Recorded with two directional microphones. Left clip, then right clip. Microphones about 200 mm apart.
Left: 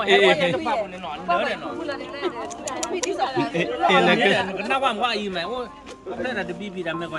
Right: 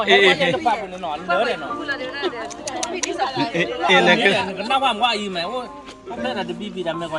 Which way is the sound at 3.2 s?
20° left (ahead or behind).